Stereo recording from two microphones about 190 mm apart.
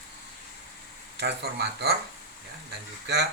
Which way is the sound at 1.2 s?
60° right (ahead or behind).